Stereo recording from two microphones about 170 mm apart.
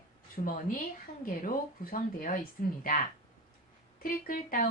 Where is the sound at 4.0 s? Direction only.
55° left (ahead or behind).